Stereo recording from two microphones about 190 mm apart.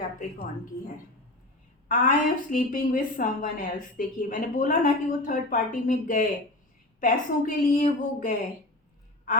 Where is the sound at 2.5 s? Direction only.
45° left (ahead or behind).